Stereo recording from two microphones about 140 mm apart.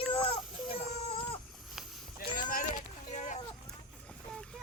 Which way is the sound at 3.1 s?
55° left (ahead or behind).